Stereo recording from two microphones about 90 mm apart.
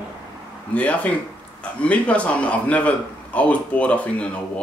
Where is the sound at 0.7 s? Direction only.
15° left (ahead or behind).